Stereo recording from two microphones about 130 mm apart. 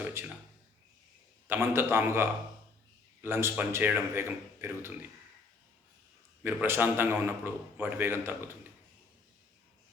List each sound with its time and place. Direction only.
0.0 s a sound: 20° right (ahead or behind)
1.5 s a man's voice: 20° right (ahead or behind)
6.4 s a man's voice: 15° right (ahead or behind)